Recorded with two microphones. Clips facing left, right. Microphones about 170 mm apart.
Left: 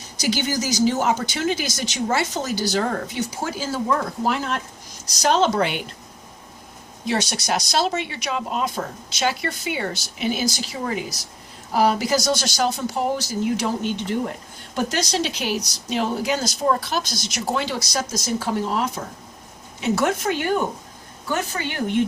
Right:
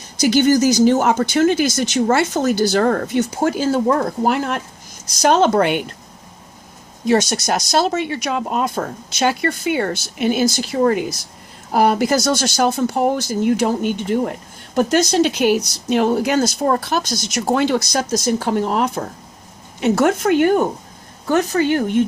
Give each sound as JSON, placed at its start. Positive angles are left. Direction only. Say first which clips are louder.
{"t": 0.2, "sound": "speech", "louder": "right 10 dB", "side_deg": -55}
{"t": 7.1, "sound": "speech", "louder": "right 7 dB", "side_deg": -45}